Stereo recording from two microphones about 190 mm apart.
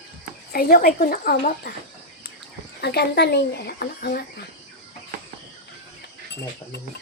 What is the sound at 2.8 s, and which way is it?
Speech, 60° left (ahead or behind).